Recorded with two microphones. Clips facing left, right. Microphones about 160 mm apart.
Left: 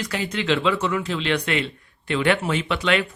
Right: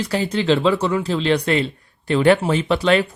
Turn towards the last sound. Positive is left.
turn(degrees=-35)  # may be behind; listen again after turning